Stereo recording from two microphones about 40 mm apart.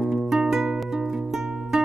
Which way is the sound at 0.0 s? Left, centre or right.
Centre.